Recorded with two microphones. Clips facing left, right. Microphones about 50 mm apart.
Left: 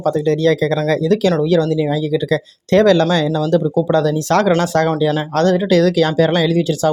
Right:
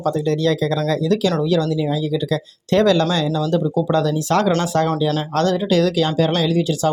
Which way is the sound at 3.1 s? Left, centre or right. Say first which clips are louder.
Left 4 dB; left.